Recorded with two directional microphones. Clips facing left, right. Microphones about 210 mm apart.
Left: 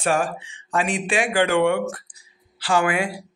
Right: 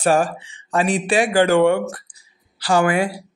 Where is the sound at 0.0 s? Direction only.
35° right (ahead or behind).